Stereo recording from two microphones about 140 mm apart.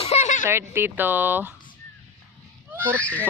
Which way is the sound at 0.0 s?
50° left (ahead or behind).